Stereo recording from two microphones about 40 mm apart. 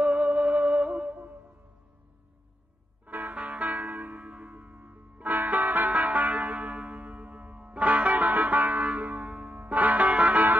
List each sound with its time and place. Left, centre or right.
0.0 s music: right
3.1 s music: right